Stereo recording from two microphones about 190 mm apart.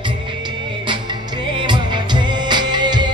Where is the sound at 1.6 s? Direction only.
25° right (ahead or behind).